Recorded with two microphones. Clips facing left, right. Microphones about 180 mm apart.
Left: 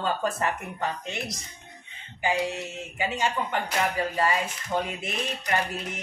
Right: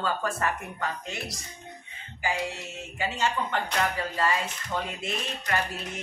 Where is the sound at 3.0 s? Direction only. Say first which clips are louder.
Left 1 dB; 15° left (ahead or behind).